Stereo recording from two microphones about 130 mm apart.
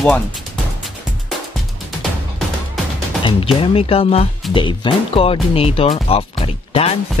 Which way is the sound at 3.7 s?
50° left (ahead or behind).